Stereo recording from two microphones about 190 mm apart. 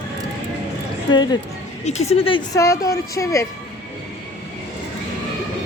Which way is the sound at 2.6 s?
15° left (ahead or behind).